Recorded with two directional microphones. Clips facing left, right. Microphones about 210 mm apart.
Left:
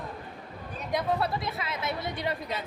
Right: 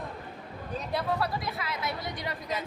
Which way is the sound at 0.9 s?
20° left (ahead or behind).